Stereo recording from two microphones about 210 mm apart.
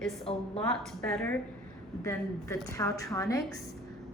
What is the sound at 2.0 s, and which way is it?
A woman's voice, 15° left (ahead or behind).